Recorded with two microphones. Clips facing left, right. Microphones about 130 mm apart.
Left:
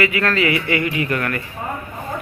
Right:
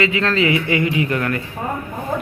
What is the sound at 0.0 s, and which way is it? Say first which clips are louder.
A man's voice: right 1 dB; 20° right (ahead or behind).